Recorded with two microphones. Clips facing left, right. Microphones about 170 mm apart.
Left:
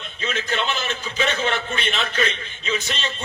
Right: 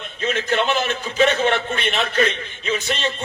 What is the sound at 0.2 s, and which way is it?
A man's voice, 55° right (ahead or behind).